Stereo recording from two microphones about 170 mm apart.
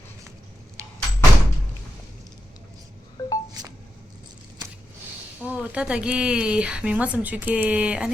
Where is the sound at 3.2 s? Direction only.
20° left (ahead or behind).